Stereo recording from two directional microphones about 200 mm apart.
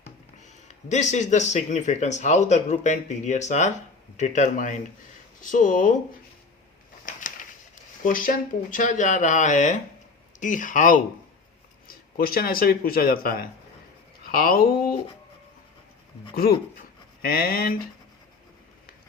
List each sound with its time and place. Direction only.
0.7 s speech: 35° left (ahead or behind)
7.0 s a sound: 40° left (ahead or behind)
8.0 s speech: 45° left (ahead or behind)
16.3 s speech: 50° left (ahead or behind)